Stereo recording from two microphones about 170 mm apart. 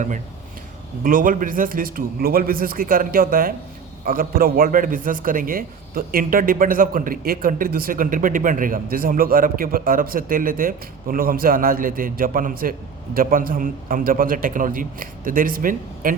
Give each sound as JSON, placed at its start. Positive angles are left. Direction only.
{"t": 1.0, "sound": "a man's voice", "side_deg": -55}